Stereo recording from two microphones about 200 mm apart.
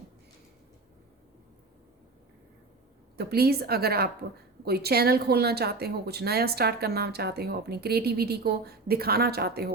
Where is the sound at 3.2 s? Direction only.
50° right (ahead or behind).